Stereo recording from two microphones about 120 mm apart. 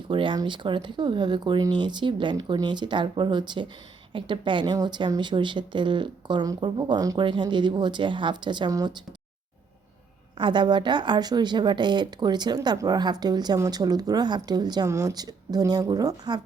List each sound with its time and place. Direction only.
0.1 s speech: 45° right (ahead or behind)
10.3 s speech: 40° right (ahead or behind)